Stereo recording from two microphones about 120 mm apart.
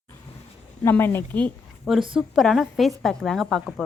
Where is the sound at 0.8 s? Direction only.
20° left (ahead or behind).